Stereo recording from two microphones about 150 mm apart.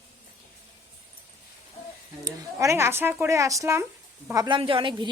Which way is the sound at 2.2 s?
20° right (ahead or behind).